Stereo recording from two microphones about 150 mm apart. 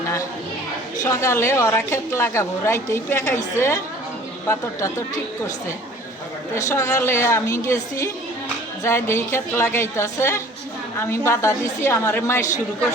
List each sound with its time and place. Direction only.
1.0 s a woman's voice: 20° left (ahead or behind)
6.5 s a woman's voice: 20° left (ahead or behind)